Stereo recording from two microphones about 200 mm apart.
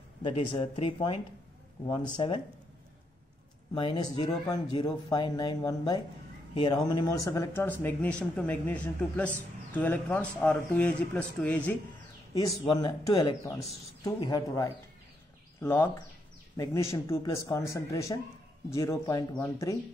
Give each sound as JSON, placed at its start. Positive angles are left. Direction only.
{"t": 0.2, "sound": "speech", "side_deg": 25}
{"t": 3.7, "sound": "speech", "side_deg": 25}
{"t": 12.6, "sound": "speech", "side_deg": 20}